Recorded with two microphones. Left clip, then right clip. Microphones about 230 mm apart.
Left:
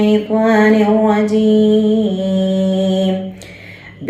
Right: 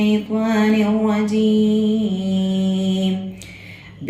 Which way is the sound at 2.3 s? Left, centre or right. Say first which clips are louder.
Left 8 dB; right.